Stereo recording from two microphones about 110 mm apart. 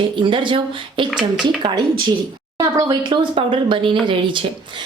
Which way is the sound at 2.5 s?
35° right (ahead or behind).